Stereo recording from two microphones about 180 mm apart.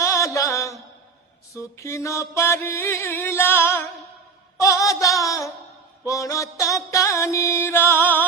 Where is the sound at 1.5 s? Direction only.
15° left (ahead or behind).